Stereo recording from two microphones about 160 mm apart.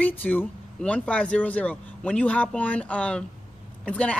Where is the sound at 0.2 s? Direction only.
10° left (ahead or behind).